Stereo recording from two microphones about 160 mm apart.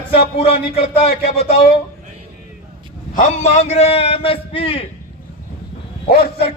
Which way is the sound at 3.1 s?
50° left (ahead or behind).